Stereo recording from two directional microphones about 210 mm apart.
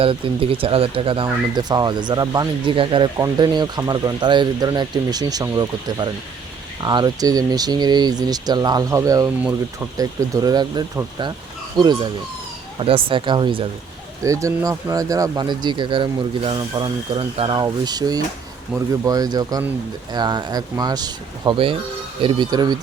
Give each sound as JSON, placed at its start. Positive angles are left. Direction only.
{"t": 0.0, "sound": "speech", "side_deg": -25}